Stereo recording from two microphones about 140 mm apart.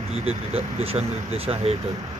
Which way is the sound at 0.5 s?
45° right (ahead or behind).